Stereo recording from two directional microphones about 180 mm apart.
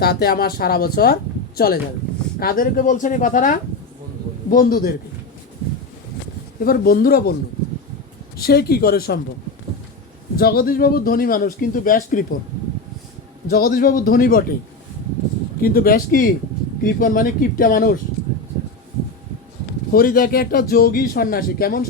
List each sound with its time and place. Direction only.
0.0 s a man's voice: 60° left (ahead or behind)
6.6 s a man's voice: 55° left (ahead or behind)
8.4 s a man's voice: 60° left (ahead or behind)
10.3 s speech: 55° left (ahead or behind)
13.5 s a man's voice: 55° left (ahead or behind)
15.6 s a man's voice: 55° left (ahead or behind)
19.9 s a man's voice: 55° left (ahead or behind)